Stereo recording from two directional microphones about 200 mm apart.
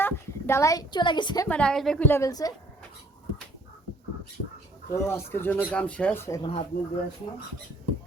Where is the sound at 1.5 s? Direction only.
5° left (ahead or behind).